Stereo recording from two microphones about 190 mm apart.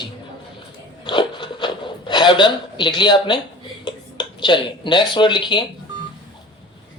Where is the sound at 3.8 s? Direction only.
25° left (ahead or behind).